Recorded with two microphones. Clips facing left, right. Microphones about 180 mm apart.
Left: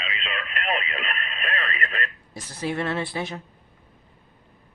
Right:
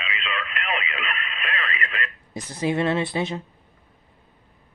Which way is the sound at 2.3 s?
15° right (ahead or behind).